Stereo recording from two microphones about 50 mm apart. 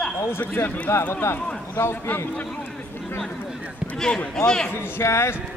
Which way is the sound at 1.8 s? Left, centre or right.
Left.